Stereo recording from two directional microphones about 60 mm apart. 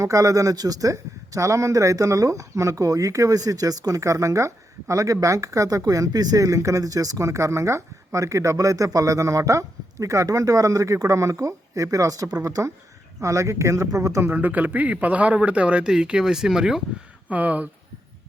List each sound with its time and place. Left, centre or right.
0.0 s speech: right
14.3 s a man's voice: right; by 16.8 s centre
17.2 s speech: right